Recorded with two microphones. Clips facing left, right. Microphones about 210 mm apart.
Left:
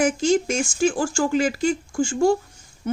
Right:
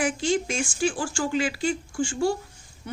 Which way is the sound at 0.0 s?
45° left (ahead or behind).